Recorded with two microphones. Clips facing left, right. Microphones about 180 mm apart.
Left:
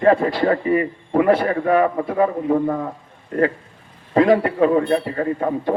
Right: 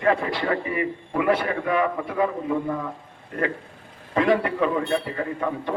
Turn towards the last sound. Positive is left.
turn(degrees=40)  # may be behind; listen again after turning